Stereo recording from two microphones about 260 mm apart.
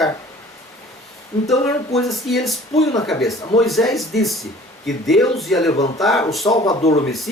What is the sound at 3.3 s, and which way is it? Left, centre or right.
Speech, centre.